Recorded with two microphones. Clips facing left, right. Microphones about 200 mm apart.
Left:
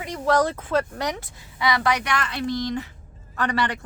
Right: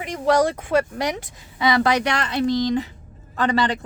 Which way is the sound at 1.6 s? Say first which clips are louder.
Right 4 dB; 25° right (ahead or behind).